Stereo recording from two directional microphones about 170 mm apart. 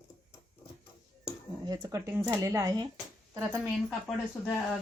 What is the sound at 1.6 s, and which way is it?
Speech, 20° right (ahead or behind).